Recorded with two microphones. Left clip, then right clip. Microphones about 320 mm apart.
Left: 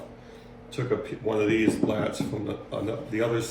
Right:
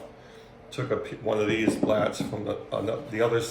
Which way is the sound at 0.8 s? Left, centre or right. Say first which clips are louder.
Left 1 dB; centre.